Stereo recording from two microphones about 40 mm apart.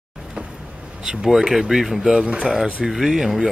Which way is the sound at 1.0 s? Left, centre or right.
Centre.